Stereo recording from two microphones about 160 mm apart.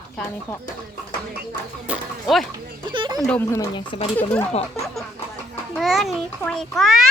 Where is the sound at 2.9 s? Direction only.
30° right (ahead or behind).